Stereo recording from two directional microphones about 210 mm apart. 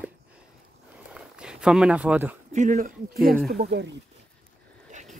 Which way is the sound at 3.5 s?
50° right (ahead or behind).